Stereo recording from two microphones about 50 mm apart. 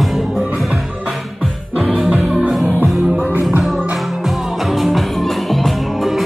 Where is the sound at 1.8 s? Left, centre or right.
Centre.